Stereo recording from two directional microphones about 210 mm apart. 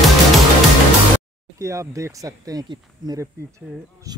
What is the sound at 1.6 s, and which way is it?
Speech, 15° right (ahead or behind).